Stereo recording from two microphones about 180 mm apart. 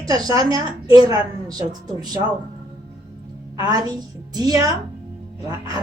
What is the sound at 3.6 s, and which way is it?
A woman's voice, 20° right (ahead or behind).